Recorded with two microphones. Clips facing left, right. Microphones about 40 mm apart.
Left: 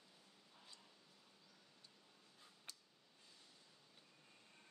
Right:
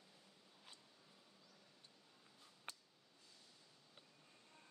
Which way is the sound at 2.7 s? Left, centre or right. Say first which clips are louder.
Right 6 dB; right.